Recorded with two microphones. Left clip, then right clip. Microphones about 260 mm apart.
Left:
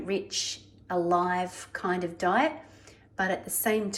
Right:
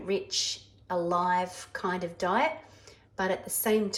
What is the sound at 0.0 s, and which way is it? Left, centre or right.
A woman's voice, centre.